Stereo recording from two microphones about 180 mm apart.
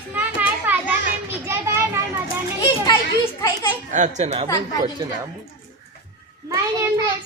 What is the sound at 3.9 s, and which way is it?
Speech, 40° right (ahead or behind).